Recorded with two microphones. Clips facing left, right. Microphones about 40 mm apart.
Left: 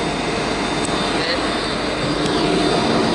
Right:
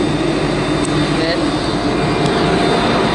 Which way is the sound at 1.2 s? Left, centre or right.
Centre.